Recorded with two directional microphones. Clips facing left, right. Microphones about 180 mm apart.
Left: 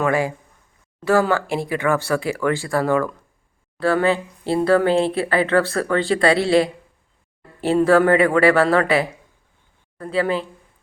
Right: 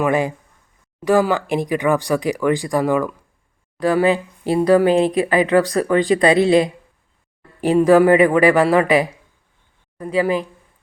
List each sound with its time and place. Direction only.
0.0 s speech: 20° right (ahead or behind)